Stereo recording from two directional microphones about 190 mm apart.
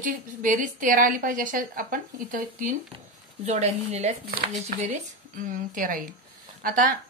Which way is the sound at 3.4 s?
35° right (ahead or behind).